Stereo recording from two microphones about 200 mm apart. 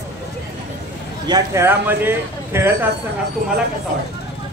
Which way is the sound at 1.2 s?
15° right (ahead or behind).